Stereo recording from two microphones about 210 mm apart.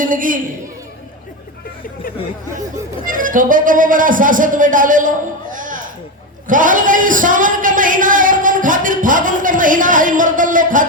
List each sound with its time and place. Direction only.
0.0 s speech: 40° right (ahead or behind)
3.1 s speech: 40° right (ahead or behind)